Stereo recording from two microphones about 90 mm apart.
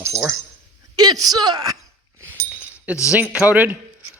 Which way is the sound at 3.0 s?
15° right (ahead or behind).